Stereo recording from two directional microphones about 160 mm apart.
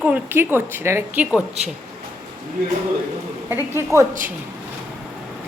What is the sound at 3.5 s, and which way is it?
Speech, 15° right (ahead or behind).